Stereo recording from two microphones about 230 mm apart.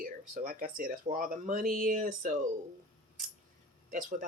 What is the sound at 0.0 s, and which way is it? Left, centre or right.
Speech, right.